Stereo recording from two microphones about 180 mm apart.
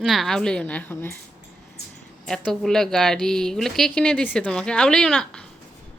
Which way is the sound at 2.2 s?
5° left (ahead or behind).